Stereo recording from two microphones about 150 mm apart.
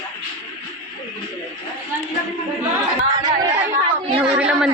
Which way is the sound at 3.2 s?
25° right (ahead or behind).